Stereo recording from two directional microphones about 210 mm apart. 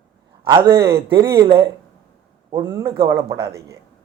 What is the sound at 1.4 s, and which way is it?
Speech, 25° right (ahead or behind).